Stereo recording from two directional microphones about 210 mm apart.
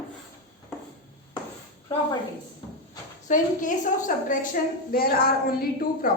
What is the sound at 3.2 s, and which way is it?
A woman's voice, 40° left (ahead or behind).